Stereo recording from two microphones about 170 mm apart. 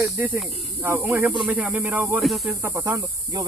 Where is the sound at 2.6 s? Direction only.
20° right (ahead or behind).